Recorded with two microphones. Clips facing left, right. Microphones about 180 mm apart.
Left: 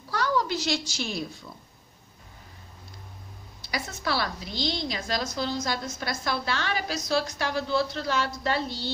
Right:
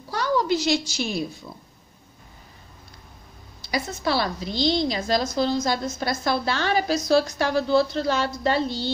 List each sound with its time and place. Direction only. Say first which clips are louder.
0.1 s a sound: right 4 dB; 20° right (ahead or behind)
0.7 s a woman's voice: right 6 dB; 15° right (ahead or behind)
3.7 s a woman's voice: right 5 dB; 25° right (ahead or behind)